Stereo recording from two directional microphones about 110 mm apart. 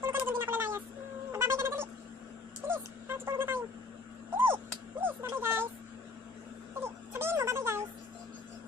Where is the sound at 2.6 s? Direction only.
20° right (ahead or behind).